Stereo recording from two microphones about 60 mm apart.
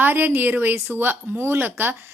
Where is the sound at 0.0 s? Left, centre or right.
Right.